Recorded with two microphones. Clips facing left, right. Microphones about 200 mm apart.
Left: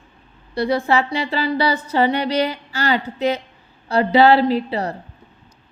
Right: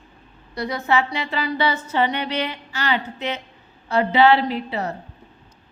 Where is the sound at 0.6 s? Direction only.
30° left (ahead or behind).